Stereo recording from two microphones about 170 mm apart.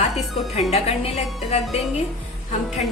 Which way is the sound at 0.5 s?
40° left (ahead or behind).